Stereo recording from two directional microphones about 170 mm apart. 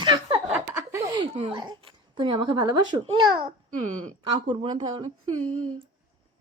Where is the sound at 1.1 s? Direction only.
30° right (ahead or behind).